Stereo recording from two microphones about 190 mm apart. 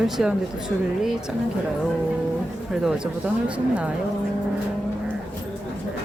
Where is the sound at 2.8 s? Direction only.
5° right (ahead or behind).